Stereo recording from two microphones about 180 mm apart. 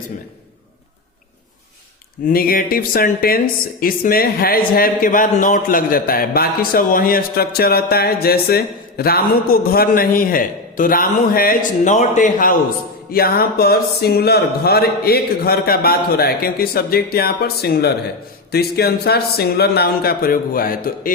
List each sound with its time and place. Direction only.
2.2 s speech: 55° left (ahead or behind)